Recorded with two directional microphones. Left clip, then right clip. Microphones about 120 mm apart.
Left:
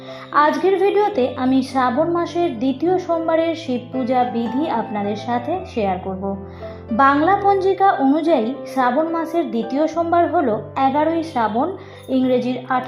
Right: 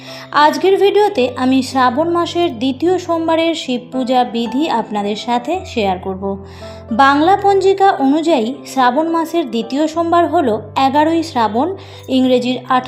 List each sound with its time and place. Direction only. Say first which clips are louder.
0.3 s a woman's voice: right 4 dB; 5° right (ahead or behind)